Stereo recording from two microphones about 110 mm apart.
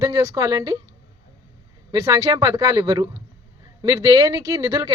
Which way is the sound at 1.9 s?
30° right (ahead or behind).